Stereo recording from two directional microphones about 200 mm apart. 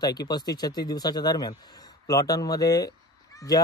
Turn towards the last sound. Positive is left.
turn(degrees=20)  # may be behind; listen again after turning